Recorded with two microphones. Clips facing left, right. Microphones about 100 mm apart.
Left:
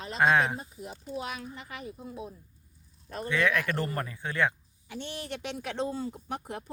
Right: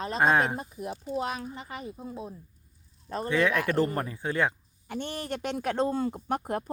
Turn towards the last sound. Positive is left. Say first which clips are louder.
# right 7 dB
turn(degrees=-55)  # may be behind; listen again after turning